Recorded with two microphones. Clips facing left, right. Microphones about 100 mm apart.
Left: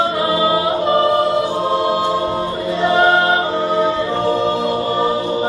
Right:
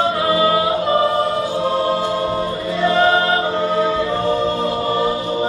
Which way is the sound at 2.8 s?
15° left (ahead or behind).